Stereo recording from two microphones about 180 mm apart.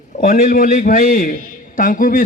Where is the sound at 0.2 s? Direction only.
50° left (ahead or behind).